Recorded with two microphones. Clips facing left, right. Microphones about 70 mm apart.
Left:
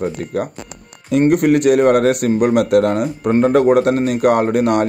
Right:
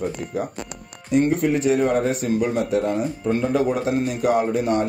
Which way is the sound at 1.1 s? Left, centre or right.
Left.